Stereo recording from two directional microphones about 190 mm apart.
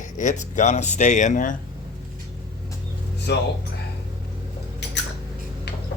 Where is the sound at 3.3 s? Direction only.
60° left (ahead or behind).